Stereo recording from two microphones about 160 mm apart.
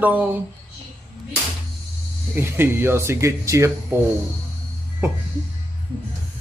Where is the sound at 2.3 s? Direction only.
15° right (ahead or behind).